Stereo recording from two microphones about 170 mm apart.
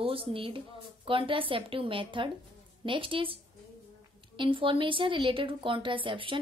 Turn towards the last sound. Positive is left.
turn(degrees=-30)  # may be behind; listen again after turning